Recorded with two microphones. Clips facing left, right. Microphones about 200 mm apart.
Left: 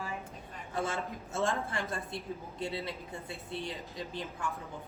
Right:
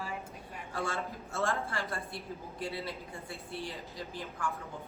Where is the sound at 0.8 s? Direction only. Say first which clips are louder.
Left 2 dB; 20° left (ahead or behind).